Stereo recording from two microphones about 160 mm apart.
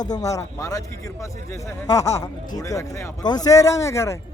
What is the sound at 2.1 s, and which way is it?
Speech, 20° left (ahead or behind).